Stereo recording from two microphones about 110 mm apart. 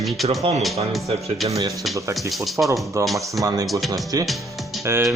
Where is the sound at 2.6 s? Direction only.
20° right (ahead or behind).